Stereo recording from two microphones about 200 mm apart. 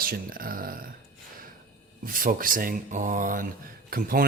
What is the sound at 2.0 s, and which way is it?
Speech, 45° right (ahead or behind).